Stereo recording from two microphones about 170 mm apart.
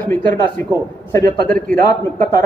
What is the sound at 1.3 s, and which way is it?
Speech, 55° right (ahead or behind).